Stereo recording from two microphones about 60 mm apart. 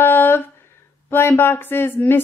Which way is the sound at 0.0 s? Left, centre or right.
Left.